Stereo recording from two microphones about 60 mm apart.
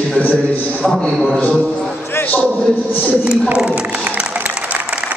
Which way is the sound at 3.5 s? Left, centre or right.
Centre.